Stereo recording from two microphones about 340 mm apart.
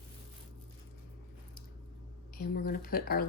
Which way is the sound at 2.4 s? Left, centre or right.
Left.